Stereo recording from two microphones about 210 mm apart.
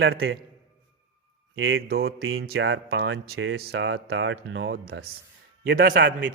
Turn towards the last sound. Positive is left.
turn(degrees=-45)  # may be behind; listen again after turning